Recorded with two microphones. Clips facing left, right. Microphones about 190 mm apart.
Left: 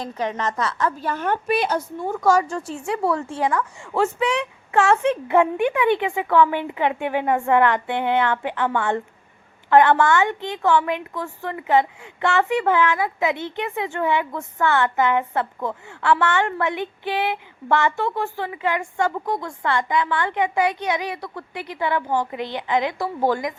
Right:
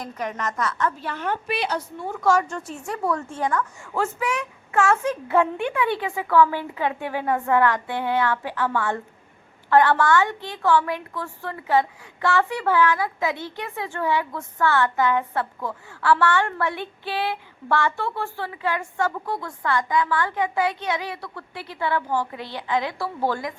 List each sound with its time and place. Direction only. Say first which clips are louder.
0.0 s a woman's voice: left 4 dB; 30° left (ahead or behind)
3.9 s speech: left 5 dB; 15° left (ahead or behind)
4.7 s a woman's voice: left 3 dB; 30° left (ahead or behind)